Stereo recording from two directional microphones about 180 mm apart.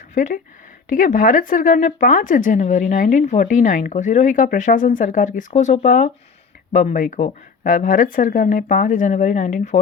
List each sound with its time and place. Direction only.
0.1 s speech: 45° left (ahead or behind)